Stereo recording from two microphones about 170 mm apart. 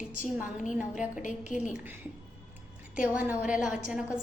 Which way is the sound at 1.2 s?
45° left (ahead or behind).